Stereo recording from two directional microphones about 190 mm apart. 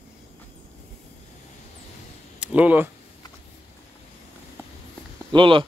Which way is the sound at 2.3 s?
5° right (ahead or behind).